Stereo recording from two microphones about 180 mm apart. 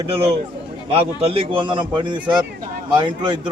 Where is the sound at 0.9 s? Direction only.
30° right (ahead or behind).